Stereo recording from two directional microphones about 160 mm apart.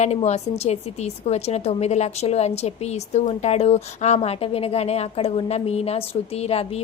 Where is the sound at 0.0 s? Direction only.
45° left (ahead or behind).